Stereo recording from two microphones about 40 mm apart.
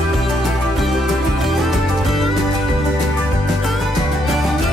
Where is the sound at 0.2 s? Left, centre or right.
Centre.